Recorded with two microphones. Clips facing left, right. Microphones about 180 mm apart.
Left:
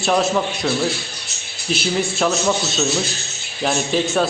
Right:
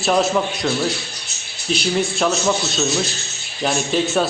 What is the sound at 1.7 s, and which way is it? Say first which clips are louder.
Speech: right 1 dB; centre (ahead or behind).